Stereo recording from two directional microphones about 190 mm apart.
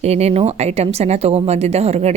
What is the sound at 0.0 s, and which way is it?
A woman's voice, 35° right (ahead or behind).